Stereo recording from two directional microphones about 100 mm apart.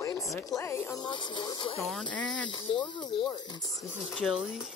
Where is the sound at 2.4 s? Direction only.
50° left (ahead or behind).